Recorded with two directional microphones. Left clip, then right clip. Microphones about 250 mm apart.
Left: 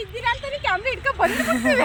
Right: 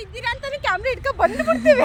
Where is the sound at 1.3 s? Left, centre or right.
Centre.